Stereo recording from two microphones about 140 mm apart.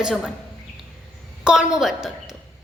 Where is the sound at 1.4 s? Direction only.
5° right (ahead or behind).